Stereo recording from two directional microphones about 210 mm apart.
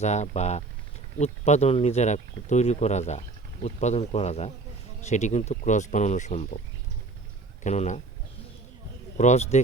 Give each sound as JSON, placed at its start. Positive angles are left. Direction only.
{"t": 0.0, "sound": "speech", "side_deg": 30}
{"t": 7.6, "sound": "speech", "side_deg": 35}
{"t": 9.1, "sound": "speech", "side_deg": 35}